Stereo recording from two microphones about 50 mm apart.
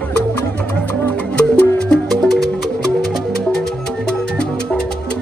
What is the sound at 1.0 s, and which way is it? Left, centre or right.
Music, left.